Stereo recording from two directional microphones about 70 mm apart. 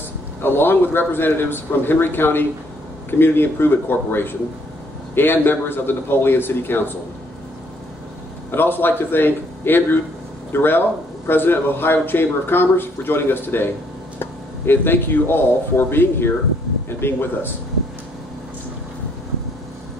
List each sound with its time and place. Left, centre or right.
0.4 s speech: left
8.5 s speech: left